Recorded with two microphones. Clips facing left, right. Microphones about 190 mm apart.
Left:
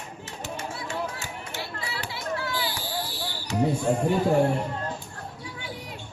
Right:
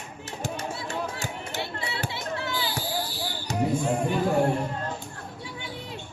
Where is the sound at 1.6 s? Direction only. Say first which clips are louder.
Right 3 dB; 25° right (ahead or behind).